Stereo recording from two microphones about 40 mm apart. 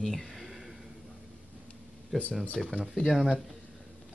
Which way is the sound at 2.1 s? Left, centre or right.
Centre.